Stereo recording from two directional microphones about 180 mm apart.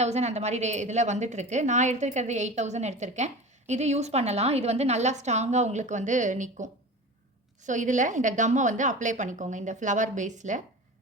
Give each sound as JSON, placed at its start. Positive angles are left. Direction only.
{"t": 0.0, "sound": "a woman's voice", "side_deg": -40}